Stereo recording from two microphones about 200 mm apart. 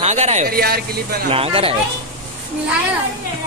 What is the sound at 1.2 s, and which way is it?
Speech, 30° right (ahead or behind).